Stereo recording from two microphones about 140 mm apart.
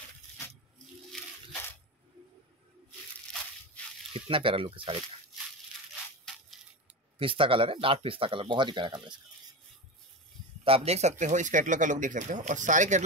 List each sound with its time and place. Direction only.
1.1 s a sound: centre (ahead or behind)
4.1 s speech: 40° right (ahead or behind)
7.2 s speech: 40° right (ahead or behind)
10.6 s speech: 45° right (ahead or behind); by 13.0 s 60° right (ahead or behind)